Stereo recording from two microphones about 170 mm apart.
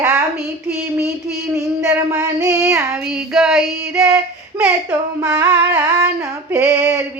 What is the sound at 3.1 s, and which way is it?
Female singing, 5° right (ahead or behind).